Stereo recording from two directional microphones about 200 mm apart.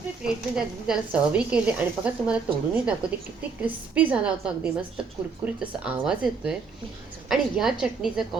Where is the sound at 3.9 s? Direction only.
5° right (ahead or behind).